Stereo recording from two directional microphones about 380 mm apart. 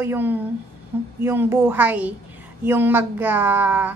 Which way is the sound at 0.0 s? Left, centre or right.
Centre.